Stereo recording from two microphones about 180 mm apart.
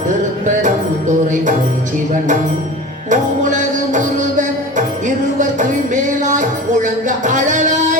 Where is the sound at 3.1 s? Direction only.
45° right (ahead or behind).